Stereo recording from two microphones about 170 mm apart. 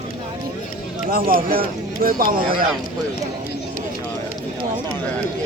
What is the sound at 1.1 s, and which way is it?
Speech, 60° right (ahead or behind).